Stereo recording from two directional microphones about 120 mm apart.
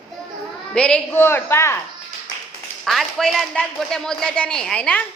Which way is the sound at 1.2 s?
20° left (ahead or behind).